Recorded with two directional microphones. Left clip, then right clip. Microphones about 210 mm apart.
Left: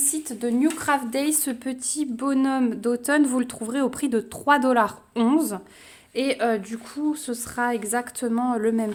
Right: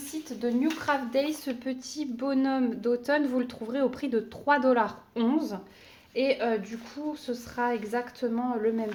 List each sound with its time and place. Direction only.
0.1 s a woman's voice: 55° left (ahead or behind)